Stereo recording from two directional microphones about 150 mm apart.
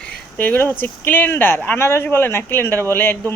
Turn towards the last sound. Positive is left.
turn(degrees=15)  # may be behind; listen again after turning